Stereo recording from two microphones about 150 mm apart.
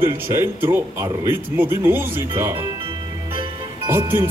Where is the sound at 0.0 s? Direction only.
15° right (ahead or behind).